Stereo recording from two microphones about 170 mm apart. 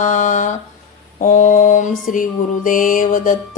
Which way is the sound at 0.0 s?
45° left (ahead or behind).